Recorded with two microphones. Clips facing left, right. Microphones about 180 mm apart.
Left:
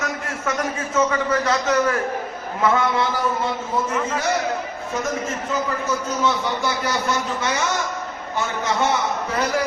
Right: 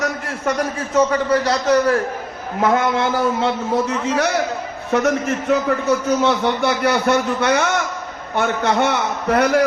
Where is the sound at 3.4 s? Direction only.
75° right (ahead or behind).